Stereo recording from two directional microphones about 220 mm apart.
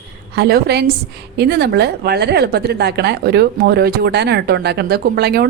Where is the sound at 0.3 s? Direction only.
45° right (ahead or behind).